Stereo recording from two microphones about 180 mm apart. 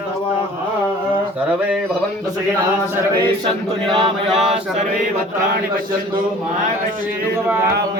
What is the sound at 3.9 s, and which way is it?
Mantra, 30° right (ahead or behind).